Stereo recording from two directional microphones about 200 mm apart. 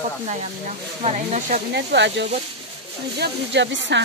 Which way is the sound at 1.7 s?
60° right (ahead or behind).